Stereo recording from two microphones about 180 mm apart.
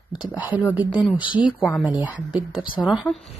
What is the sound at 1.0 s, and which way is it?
Speech, centre (ahead or behind).